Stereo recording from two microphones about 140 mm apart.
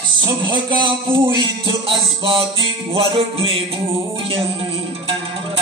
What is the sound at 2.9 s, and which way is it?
Music, 40° right (ahead or behind).